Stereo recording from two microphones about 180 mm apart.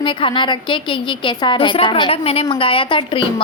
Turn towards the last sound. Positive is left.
turn(degrees=30)  # may be behind; listen again after turning